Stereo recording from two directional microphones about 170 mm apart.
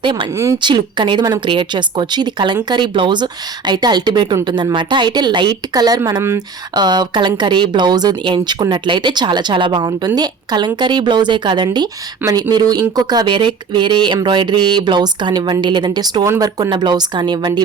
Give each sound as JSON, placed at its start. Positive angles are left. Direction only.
{"t": 0.0, "sound": "speech", "side_deg": -30}